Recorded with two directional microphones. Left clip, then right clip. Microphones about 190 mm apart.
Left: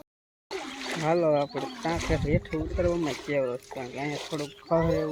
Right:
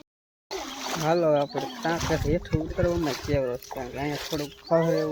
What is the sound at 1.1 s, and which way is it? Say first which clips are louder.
Speech: right 2 dB; 20° right (ahead or behind).